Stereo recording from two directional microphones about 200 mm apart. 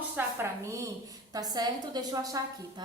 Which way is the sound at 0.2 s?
15° right (ahead or behind).